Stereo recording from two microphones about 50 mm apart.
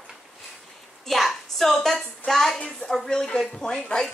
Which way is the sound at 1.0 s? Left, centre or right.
Centre.